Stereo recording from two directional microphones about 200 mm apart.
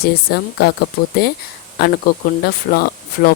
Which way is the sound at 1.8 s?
50° left (ahead or behind).